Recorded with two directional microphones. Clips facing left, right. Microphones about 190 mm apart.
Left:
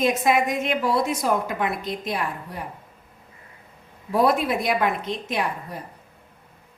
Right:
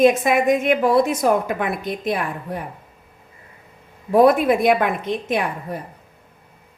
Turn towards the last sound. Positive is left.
turn(degrees=-55)  # may be behind; listen again after turning